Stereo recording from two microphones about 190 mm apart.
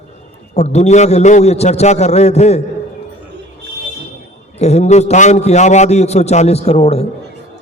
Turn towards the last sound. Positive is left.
turn(degrees=30)  # may be behind; listen again after turning